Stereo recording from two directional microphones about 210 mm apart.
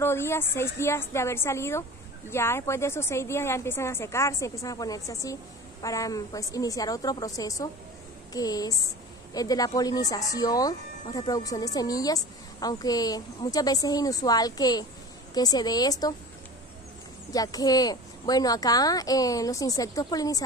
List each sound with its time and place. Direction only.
0.0 s a woman's voice: 10° left (ahead or behind)
17.3 s a woman's voice: 15° left (ahead or behind)